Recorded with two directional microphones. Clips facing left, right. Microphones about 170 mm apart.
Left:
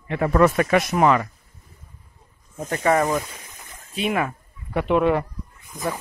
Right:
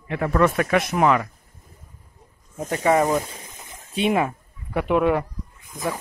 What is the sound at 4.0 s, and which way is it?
Speech, 25° right (ahead or behind).